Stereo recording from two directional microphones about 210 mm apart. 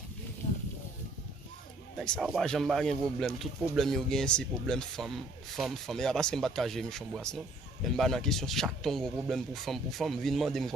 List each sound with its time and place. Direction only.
0.4 s snake: 35° left (ahead or behind)
2.0 s speech: centre (ahead or behind)